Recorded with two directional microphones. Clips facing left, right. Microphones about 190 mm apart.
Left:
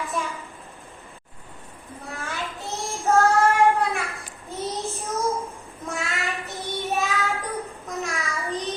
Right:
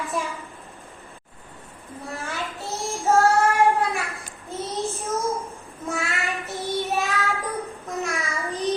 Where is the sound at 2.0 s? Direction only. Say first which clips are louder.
Right 1 dB; centre (ahead or behind).